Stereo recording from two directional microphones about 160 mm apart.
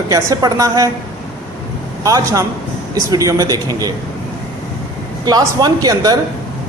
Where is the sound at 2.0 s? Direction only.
20° right (ahead or behind).